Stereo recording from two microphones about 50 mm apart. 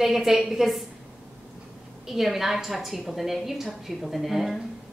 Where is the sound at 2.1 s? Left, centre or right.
Centre.